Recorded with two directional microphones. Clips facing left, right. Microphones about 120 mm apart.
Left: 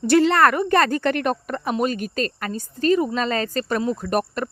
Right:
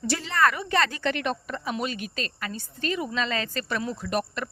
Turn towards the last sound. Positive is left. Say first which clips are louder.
# left 5 dB
turn(degrees=45)  # may be behind; listen again after turning